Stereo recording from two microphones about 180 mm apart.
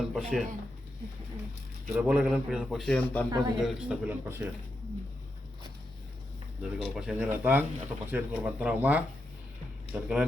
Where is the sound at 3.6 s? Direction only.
10° right (ahead or behind).